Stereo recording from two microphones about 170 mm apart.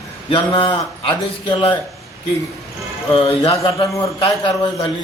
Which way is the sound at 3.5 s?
20° left (ahead or behind).